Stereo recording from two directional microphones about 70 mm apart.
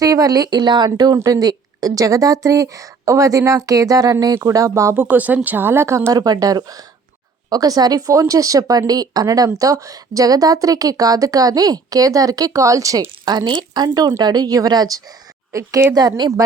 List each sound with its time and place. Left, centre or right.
0.0 s a woman's voice: right
0.9 s a woman's voice: right
4.9 s speech: right
6.1 s a woman's voice: right
8.9 s a woman's voice: right
13.2 s a woman's voice: right
15.5 s speech: right
16.0 s a woman's voice: right